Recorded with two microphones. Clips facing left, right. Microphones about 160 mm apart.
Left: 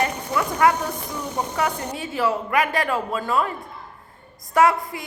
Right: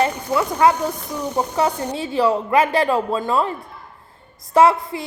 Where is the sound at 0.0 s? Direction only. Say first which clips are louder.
Right 4 dB; 25° right (ahead or behind).